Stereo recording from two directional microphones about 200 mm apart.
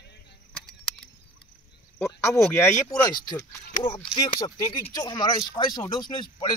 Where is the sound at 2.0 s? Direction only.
15° left (ahead or behind).